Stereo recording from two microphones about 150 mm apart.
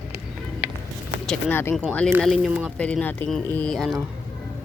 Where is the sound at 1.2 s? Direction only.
15° left (ahead or behind).